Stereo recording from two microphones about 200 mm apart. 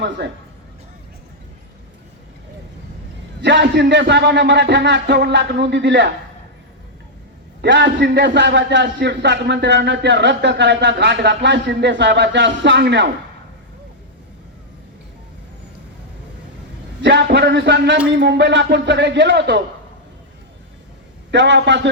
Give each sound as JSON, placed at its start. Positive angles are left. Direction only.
{"t": 3.4, "sound": "a man's voice", "side_deg": -60}
{"t": 7.6, "sound": "a man's voice", "side_deg": -60}
{"t": 17.0, "sound": "a man's voice", "side_deg": -60}
{"t": 21.2, "sound": "a man's voice", "side_deg": -65}